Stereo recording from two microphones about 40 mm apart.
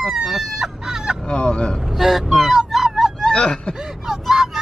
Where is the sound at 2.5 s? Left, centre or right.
Centre.